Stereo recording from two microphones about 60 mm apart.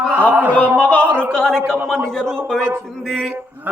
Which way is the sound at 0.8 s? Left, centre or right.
Left.